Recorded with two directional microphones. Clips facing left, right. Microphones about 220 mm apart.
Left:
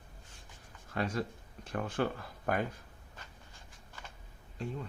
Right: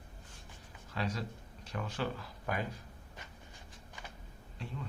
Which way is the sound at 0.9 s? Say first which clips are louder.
Left 4 dB; 50° left (ahead or behind).